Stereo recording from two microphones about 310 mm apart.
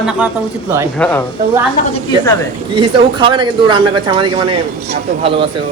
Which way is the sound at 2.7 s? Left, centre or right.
Centre.